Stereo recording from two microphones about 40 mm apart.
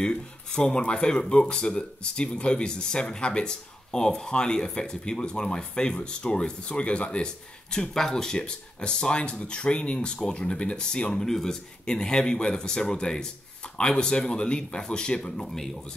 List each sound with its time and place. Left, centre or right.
0.0 s speech: left
7.7 s speech: centre
11.2 s speech: centre
15.4 s speech: centre